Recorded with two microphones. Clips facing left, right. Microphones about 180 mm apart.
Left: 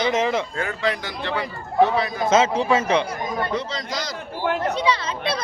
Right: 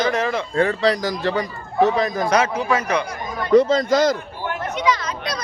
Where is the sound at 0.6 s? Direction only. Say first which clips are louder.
Right 7 dB; 35° right (ahead or behind).